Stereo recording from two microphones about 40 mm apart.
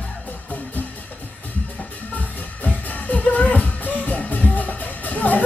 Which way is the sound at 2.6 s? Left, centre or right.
Left.